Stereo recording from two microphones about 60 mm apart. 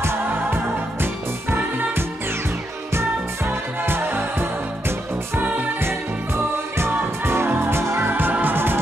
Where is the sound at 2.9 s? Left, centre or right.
Right.